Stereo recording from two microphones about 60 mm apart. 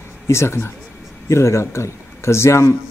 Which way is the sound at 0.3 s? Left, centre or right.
Left.